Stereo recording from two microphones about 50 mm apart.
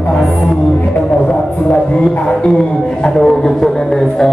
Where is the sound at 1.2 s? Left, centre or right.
Left.